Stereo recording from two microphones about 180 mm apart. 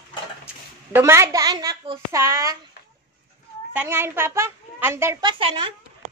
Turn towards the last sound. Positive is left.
turn(degrees=-30)  # may be behind; listen again after turning